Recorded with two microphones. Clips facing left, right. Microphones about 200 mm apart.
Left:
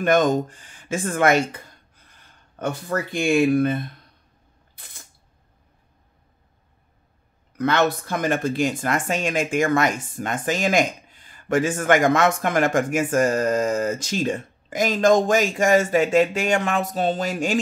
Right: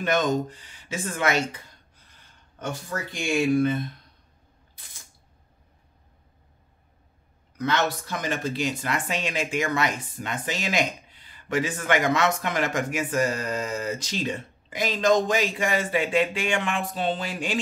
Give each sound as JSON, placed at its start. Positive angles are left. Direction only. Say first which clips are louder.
{"t": 0.0, "sound": "speech", "louder": "left 5 dB", "side_deg": 50}
{"t": 2.6, "sound": "speech", "louder": "left 6 dB", "side_deg": 55}
{"t": 7.5, "sound": "speech", "louder": "left 5 dB", "side_deg": 55}